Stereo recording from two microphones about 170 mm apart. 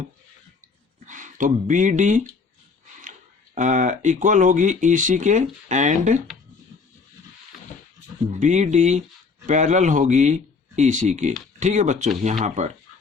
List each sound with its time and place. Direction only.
1.0 s speech: 50° right (ahead or behind)
8.3 s speech: 45° right (ahead or behind)